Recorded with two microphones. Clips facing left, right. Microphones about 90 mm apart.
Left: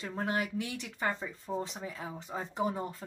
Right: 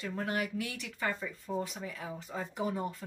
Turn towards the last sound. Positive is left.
turn(degrees=30)  # may be behind; listen again after turning